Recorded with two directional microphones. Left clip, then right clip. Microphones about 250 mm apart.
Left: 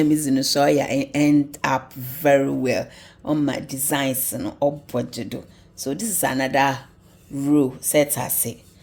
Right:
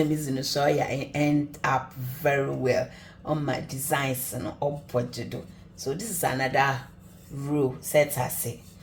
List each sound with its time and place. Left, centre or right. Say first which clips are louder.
0.0 s speech: left 8 dB; left